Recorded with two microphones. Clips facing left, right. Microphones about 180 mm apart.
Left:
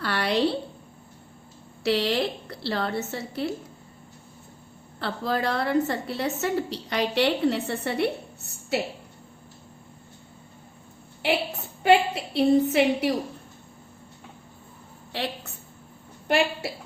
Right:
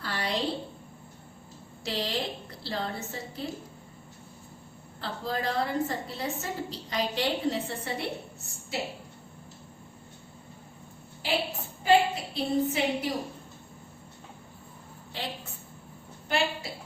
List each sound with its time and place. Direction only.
0.0 s a sound: 70° left (ahead or behind)
1.8 s a woman's voice: 70° left (ahead or behind)
4.9 s a woman's voice: 70° left (ahead or behind)
11.8 s a woman's voice: 70° left (ahead or behind)
15.1 s a woman's voice: 70° left (ahead or behind)
16.3 s a woman's voice: 70° left (ahead or behind)